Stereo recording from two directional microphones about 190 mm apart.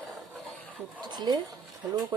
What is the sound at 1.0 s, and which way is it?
Speech, 20° right (ahead or behind).